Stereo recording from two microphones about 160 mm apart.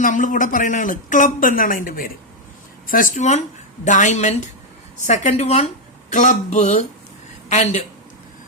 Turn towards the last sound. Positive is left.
turn(degrees=45)  # may be behind; listen again after turning